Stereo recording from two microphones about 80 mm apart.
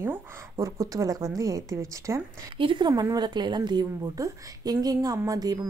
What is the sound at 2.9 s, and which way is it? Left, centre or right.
A woman's voice, right.